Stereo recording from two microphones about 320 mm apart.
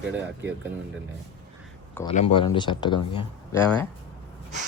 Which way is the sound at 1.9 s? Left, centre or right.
Centre.